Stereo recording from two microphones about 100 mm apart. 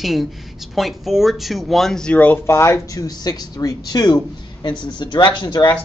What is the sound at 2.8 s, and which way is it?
Speech, 35° left (ahead or behind).